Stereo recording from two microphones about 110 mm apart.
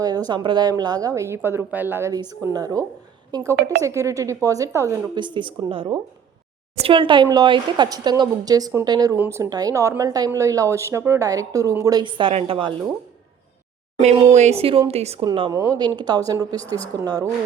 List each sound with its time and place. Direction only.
0.0 s a woman's voice: 35° right (ahead or behind); by 2.1 s 20° right (ahead or behind)
2.5 s a woman's voice: 35° right (ahead or behind)
5.1 s a woman's voice: 45° right (ahead or behind)
9.1 s a woman's voice: 20° right (ahead or behind)
9.4 s a woman's voice: 35° right (ahead or behind)
12.0 s speech: 50° right (ahead or behind)
12.3 s a woman's voice: 60° right (ahead or behind)
14.3 s speech: 80° right
15.2 s a woman's voice: 45° right (ahead or behind)